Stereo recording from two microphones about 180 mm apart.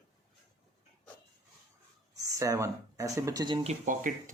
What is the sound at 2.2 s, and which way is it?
Speech, 20° right (ahead or behind).